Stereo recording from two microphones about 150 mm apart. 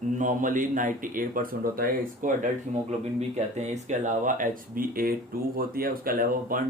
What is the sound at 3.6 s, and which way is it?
Speech, 50° right (ahead or behind).